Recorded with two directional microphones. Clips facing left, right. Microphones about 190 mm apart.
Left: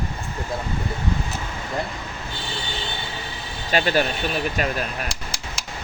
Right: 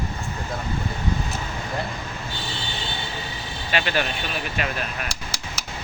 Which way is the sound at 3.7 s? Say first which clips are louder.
Left 4 dB; 40° left (ahead or behind).